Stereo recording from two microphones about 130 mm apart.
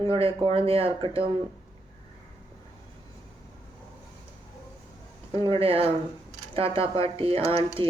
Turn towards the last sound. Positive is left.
turn(degrees=-50)  # may be behind; listen again after turning